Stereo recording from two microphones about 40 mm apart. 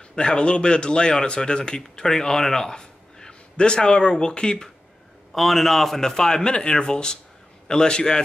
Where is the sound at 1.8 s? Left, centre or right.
Centre.